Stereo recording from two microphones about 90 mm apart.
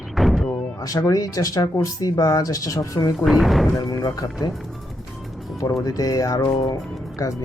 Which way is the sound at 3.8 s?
40° left (ahead or behind).